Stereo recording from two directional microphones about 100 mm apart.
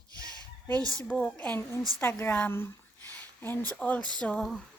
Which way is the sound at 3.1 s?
20° left (ahead or behind).